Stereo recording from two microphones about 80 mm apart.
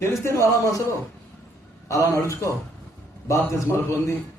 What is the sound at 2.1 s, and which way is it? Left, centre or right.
A man's voice, left.